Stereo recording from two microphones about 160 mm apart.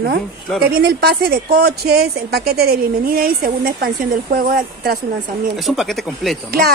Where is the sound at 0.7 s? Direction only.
80° right.